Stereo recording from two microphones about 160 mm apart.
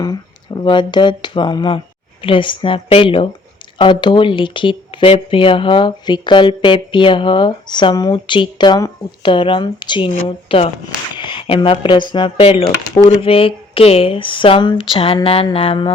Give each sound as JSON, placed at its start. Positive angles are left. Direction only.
{"t": 0.0, "sound": "speech", "side_deg": 25}
{"t": 11.1, "sound": "a sound", "side_deg": 30}
{"t": 12.1, "sound": "speech", "side_deg": 35}